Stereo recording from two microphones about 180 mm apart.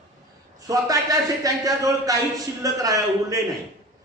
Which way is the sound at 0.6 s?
20° right (ahead or behind).